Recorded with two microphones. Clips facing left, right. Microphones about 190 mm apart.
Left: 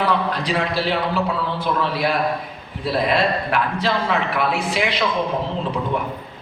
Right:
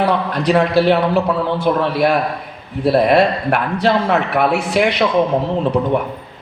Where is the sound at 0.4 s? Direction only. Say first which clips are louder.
Right 9 dB; 60° right (ahead or behind).